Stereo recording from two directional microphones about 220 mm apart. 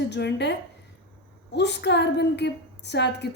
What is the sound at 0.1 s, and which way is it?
Speech, 50° left (ahead or behind).